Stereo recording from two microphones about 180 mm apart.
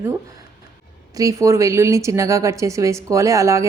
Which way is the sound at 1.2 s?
15° right (ahead or behind).